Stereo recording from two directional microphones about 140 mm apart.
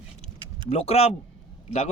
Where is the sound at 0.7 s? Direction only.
50° left (ahead or behind).